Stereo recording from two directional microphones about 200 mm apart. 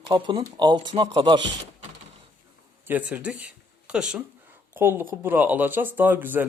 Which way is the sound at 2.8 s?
5° right (ahead or behind).